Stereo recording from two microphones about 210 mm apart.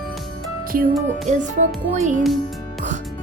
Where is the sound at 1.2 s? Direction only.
35° right (ahead or behind).